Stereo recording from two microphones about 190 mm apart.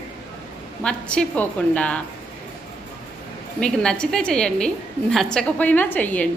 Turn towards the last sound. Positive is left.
turn(degrees=10)  # may be behind; listen again after turning